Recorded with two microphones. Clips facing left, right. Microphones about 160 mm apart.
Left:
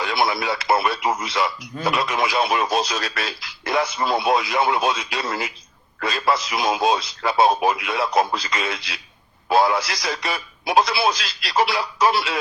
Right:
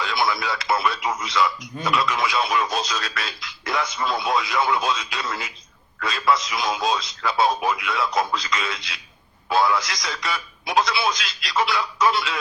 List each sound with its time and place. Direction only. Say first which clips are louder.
0.0 s speech: left 2 dB; 30° left (ahead or behind)